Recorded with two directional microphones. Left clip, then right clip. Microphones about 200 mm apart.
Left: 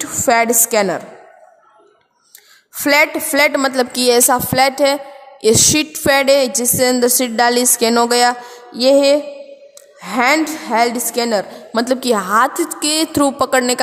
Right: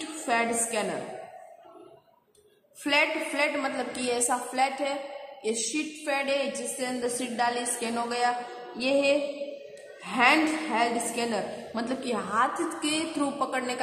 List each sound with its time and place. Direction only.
0.0 s a woman's voice: 60° left (ahead or behind)
2.8 s a woman's voice: 55° left (ahead or behind)